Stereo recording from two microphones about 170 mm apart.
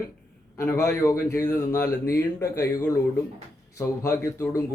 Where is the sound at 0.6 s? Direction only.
15° left (ahead or behind).